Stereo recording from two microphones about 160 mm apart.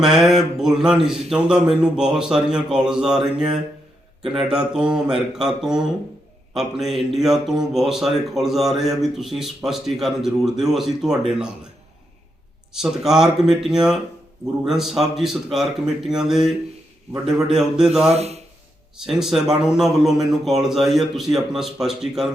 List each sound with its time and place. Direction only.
0.0 s speech: centre (ahead or behind)
12.7 s speech: 5° right (ahead or behind)
18.1 s speech: 40° right (ahead or behind)
18.9 s speech: 5° right (ahead or behind)